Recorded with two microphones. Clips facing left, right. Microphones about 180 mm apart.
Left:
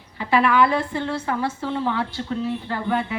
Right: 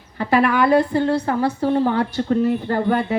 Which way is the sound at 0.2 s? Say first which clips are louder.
Right 1 dB; 45° right (ahead or behind).